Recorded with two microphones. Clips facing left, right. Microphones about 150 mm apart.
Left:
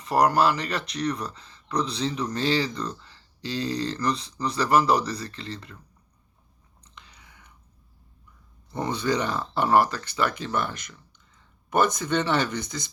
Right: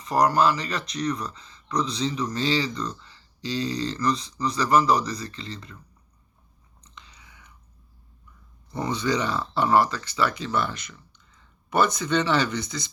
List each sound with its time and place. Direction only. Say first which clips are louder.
0.0 s speech: even; 60° left (ahead or behind)
6.9 s biting: right 1 dB; 55° left (ahead or behind)
8.7 s speech: even; 55° left (ahead or behind)